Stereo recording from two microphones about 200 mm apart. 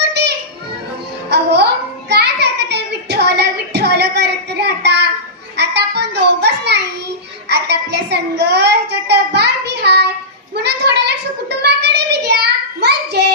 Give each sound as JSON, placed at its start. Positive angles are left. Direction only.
{"t": 0.0, "sound": "children playing", "side_deg": -55}
{"t": 1.3, "sound": "music", "side_deg": -55}
{"t": 2.0, "sound": "child singing", "side_deg": -55}
{"t": 7.5, "sound": "a child's voice", "side_deg": -55}
{"t": 10.5, "sound": "child singing", "side_deg": -55}